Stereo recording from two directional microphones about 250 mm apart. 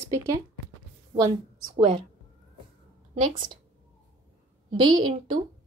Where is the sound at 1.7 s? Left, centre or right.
Right.